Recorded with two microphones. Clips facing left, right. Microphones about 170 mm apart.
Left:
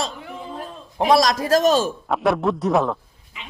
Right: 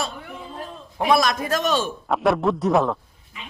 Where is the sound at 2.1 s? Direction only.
Centre (ahead or behind).